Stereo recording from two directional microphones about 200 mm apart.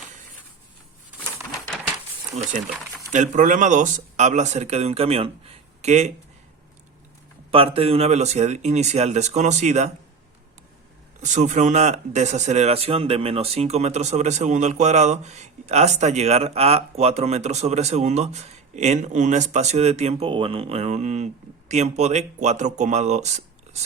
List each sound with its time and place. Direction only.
2.3 s speech: 35° right (ahead or behind)
7.5 s speech: 30° right (ahead or behind)
11.2 s speech: 35° right (ahead or behind)
23.7 s a sound: 35° right (ahead or behind)